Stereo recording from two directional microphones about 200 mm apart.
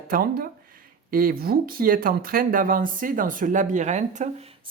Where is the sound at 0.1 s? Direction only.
50° right (ahead or behind).